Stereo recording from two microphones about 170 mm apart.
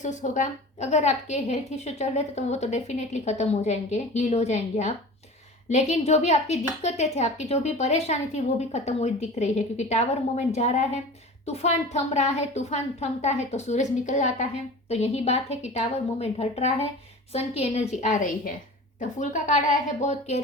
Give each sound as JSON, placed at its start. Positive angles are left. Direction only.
{"t": 0.0, "sound": "a woman's voice", "side_deg": 45}